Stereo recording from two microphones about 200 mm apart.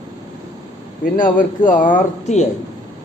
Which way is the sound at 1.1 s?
40° left (ahead or behind).